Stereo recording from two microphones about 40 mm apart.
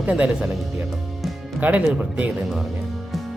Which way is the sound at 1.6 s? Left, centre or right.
Right.